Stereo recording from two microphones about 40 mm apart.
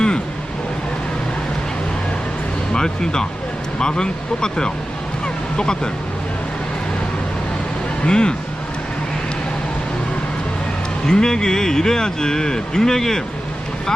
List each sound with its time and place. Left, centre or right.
2.7 s speech: centre
5.2 s vehicle: left
8.0 s speech: left
11.0 s speech: centre